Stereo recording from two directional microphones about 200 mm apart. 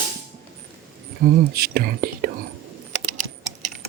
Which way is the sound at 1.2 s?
45° right (ahead or behind).